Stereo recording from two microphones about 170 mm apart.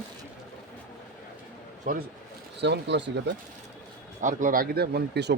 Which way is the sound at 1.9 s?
50° right (ahead or behind).